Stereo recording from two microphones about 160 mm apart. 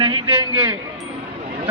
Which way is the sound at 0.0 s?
30° right (ahead or behind).